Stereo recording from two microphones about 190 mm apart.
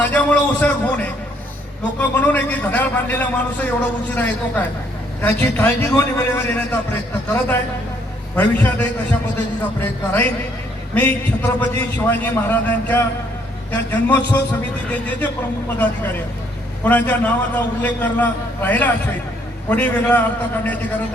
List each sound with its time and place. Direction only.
0.0 s a sound: 10° left (ahead or behind)
2.0 s a man's voice: 10° left (ahead or behind)
16.8 s a man's voice: 10° left (ahead or behind)